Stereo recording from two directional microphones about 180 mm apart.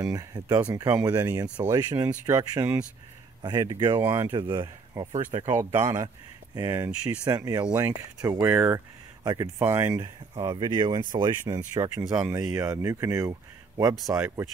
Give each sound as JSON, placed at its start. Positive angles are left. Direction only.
{"t": 0.0, "sound": "speech", "side_deg": -20}
{"t": 3.4, "sound": "speech", "side_deg": -25}
{"t": 5.4, "sound": "speech", "side_deg": -15}